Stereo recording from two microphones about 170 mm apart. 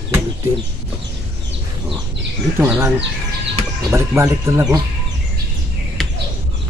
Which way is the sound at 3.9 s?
15° right (ahead or behind).